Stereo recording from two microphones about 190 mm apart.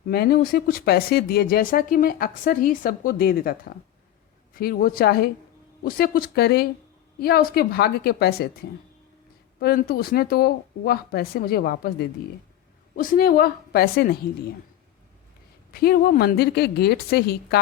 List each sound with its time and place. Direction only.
0.1 s speech: 55° left (ahead or behind)
4.5 s speech: 50° left (ahead or behind)
9.6 s speech: 55° left (ahead or behind)
15.7 s speech: 50° left (ahead or behind)